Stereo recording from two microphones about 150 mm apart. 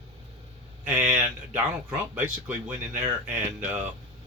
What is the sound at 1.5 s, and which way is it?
Speech, 10° right (ahead or behind).